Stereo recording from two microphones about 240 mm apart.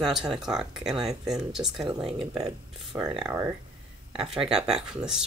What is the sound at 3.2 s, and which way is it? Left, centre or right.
Speech, centre.